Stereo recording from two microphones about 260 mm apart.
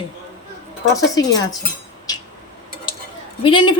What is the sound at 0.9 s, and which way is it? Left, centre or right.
Speech, centre.